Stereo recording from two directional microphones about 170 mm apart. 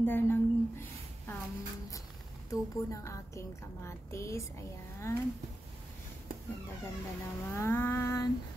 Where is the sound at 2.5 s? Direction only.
20° left (ahead or behind).